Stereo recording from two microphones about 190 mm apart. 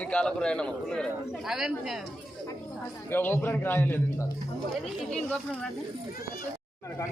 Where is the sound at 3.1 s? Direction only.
10° left (ahead or behind).